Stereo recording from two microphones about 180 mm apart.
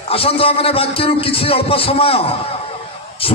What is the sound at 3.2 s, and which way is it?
Speech, 30° left (ahead or behind).